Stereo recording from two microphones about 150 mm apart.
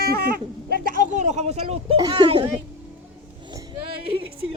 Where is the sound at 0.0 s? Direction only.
90° right; by 2.0 s 40° right (ahead or behind).